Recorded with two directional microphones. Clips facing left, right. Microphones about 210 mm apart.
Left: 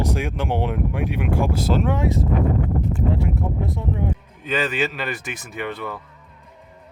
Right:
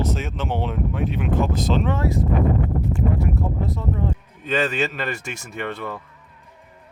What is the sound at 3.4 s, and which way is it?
Speech, 15° left (ahead or behind).